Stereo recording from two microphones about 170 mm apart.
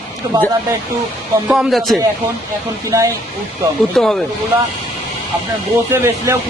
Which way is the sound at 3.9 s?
Centre (ahead or behind).